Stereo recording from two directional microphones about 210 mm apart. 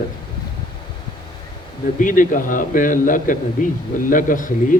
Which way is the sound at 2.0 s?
40° left (ahead or behind).